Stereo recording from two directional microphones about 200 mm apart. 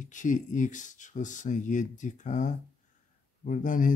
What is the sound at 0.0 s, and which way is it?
Speech, 40° left (ahead or behind).